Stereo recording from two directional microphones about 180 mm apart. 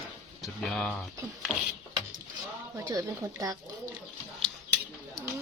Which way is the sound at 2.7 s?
20° right (ahead or behind).